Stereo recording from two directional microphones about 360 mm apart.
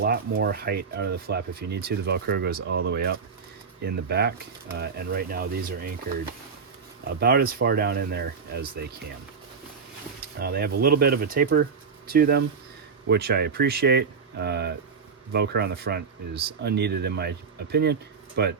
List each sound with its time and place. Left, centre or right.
0.0 s speech: right
7.2 s speech: right
10.3 s speech: right